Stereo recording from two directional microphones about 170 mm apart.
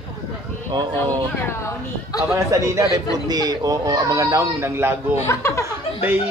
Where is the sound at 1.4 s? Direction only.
15° left (ahead or behind).